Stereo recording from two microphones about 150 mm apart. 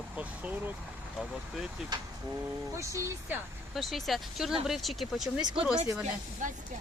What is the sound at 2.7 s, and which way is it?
Speech, 15° right (ahead or behind).